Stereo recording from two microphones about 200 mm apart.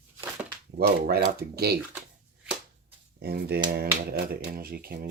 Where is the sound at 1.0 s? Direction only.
50° right (ahead or behind).